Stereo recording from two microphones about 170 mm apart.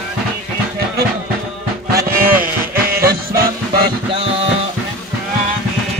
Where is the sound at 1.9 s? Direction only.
55° right (ahead or behind).